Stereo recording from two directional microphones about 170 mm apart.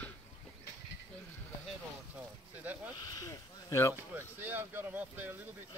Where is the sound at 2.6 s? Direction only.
10° right (ahead or behind).